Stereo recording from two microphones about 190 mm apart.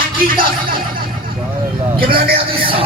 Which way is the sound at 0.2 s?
50° right (ahead or behind).